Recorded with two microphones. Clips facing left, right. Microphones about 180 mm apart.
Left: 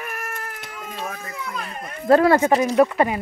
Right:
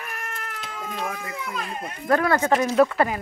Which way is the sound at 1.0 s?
15° right (ahead or behind).